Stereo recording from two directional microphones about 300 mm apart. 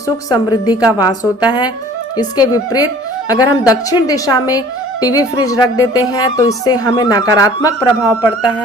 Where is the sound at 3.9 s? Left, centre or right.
Centre.